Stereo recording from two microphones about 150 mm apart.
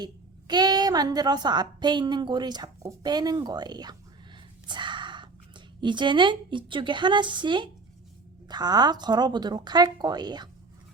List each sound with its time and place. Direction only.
0.0 s a woman's voice: 30° right (ahead or behind)